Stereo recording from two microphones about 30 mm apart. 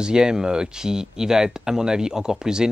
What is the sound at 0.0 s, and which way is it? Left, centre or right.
Speech, right.